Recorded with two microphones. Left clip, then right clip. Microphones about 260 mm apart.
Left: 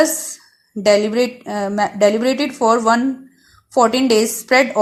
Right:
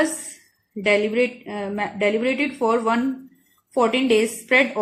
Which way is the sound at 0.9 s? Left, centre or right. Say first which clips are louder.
Left 5 dB; left.